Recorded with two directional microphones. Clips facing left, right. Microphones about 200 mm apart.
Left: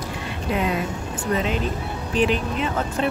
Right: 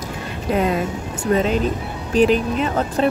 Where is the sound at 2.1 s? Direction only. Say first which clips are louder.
Right 6 dB; 40° right (ahead or behind).